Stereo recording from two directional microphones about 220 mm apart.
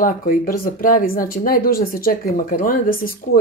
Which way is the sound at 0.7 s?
40° left (ahead or behind).